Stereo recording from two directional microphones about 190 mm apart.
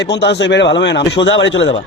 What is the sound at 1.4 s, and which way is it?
Speech, 80° left.